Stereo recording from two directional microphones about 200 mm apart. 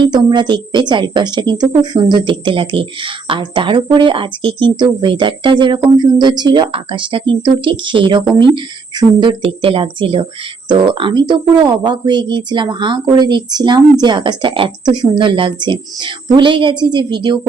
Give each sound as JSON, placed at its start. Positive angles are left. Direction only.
{"t": 0.1, "sound": "a woman's voice", "side_deg": -20}